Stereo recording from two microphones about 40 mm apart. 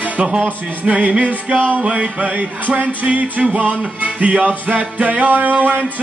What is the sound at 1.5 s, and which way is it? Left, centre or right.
Music, right.